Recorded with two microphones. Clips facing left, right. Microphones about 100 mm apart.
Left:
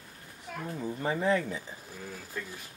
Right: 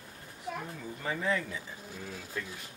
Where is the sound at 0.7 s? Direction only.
30° left (ahead or behind).